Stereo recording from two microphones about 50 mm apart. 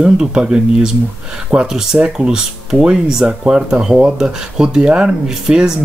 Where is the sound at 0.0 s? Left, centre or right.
Centre.